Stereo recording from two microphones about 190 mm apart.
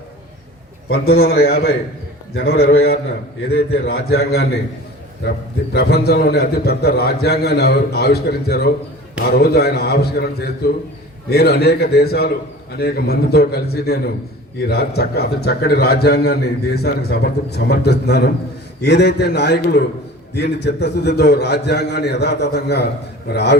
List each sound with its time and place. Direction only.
0.9 s a man's voice: 55° left (ahead or behind)
5.7 s a man's voice: 55° left (ahead or behind)